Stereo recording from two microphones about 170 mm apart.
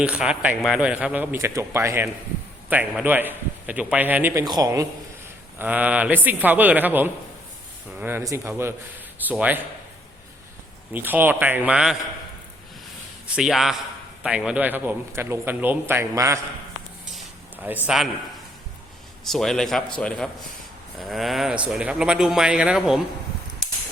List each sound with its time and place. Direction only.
0.0 s a man's voice: 5° right (ahead or behind)
5.5 s a man's voice: 10° right (ahead or behind)
10.9 s a man's voice: 10° right (ahead or behind)
13.3 s a man's voice: centre (ahead or behind); by 16.4 s 15° right (ahead or behind)
17.2 s a sound: 10° right (ahead or behind)
17.8 s a man's voice: centre (ahead or behind)
19.2 s a man's voice: centre (ahead or behind)